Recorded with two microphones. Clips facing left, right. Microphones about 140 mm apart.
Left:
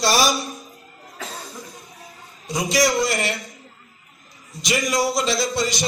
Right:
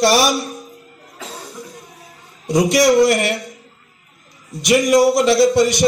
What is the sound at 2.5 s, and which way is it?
Speech, 65° right (ahead or behind).